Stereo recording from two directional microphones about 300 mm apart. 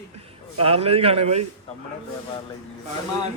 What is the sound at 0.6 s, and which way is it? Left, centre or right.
Speech, centre.